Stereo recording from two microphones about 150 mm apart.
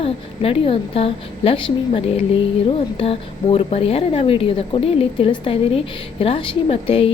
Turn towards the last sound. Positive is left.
turn(degrees=40)  # may be behind; listen again after turning